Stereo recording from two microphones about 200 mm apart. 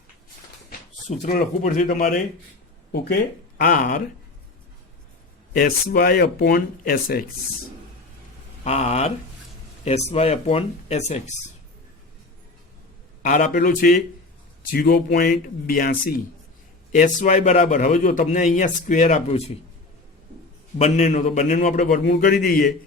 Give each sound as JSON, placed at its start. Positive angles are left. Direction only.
{"t": 0.7, "sound": "a sound", "side_deg": 45}
{"t": 1.6, "sound": "a man's voice", "side_deg": 40}
{"t": 3.6, "sound": "a man's voice", "side_deg": 40}
{"t": 5.5, "sound": "speech", "side_deg": 50}
{"t": 8.6, "sound": "a man's voice", "side_deg": 35}
{"t": 13.2, "sound": "a man's voice", "side_deg": 40}
{"t": 20.7, "sound": "a man's voice", "side_deg": 30}